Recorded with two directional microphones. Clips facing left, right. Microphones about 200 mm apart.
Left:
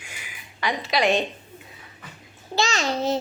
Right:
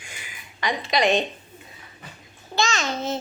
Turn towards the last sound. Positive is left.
turn(degrees=35)  # may be behind; listen again after turning